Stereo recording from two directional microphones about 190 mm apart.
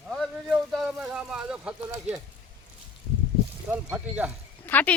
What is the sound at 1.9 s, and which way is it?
Speech, 20° right (ahead or behind).